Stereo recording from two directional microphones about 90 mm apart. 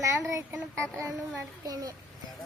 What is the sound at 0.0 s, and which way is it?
Child singing, 35° right (ahead or behind).